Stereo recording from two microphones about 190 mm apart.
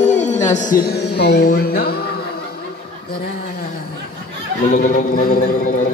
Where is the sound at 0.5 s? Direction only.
45° left (ahead or behind).